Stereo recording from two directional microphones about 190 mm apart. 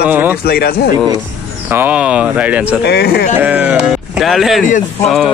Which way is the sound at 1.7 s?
10° right (ahead or behind).